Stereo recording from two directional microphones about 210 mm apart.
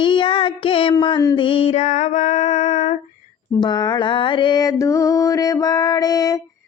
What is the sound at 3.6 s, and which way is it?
Music, 20° left (ahead or behind).